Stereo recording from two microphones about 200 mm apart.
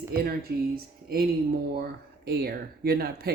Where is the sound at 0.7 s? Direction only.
50° right (ahead or behind).